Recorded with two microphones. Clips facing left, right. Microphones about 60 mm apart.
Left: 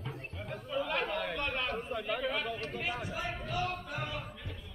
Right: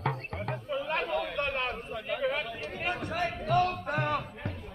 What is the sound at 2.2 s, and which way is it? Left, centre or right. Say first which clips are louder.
Chatter: right 7 dB; centre.